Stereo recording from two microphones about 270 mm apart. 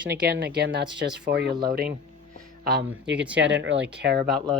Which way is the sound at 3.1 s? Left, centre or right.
Centre.